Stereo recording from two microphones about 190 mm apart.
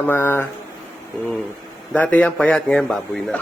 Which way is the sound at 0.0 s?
10° left (ahead or behind).